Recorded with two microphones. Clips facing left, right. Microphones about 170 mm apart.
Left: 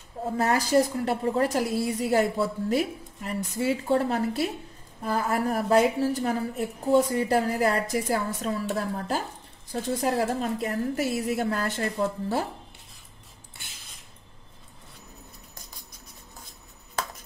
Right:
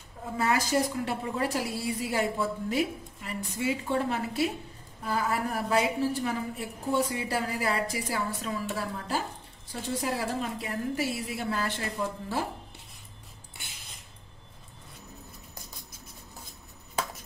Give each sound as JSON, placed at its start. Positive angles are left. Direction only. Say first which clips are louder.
{"t": 0.2, "sound": "a woman's voice", "louder": "left 3 dB", "side_deg": 40}